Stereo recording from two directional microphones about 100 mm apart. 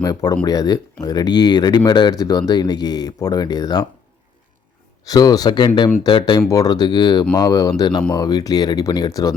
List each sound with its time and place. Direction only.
0.0 s speech: 40° left (ahead or behind)
5.0 s speech: 40° left (ahead or behind)
6.5 s speech: 40° left (ahead or behind)